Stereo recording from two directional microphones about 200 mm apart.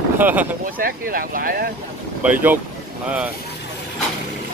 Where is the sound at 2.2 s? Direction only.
5° right (ahead or behind).